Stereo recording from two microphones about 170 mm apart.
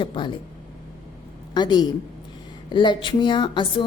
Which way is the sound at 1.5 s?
25° left (ahead or behind).